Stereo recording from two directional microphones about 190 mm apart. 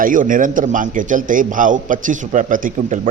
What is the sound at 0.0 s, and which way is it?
Speech, 45° right (ahead or behind).